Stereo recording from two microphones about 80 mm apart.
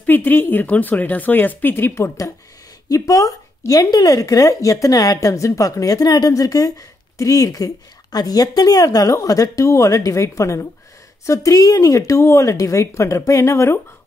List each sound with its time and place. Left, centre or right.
0.0 s a woman's voice: left